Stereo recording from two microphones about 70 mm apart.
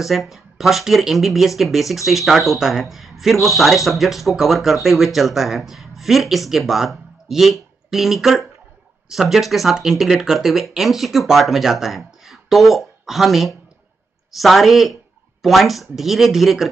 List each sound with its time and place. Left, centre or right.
0.0 s speech: centre